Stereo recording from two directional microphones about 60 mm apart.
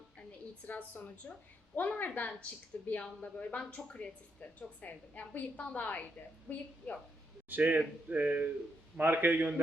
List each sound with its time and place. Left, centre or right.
0.3 s a woman's voice: left
7.5 s speech: right